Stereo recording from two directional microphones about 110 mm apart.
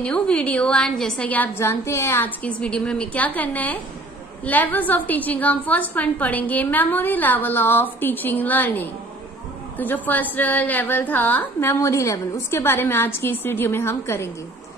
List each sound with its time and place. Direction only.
0.0 s a woman's voice: 10° left (ahead or behind)